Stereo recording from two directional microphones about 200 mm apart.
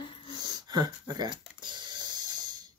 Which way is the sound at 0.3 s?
20° right (ahead or behind).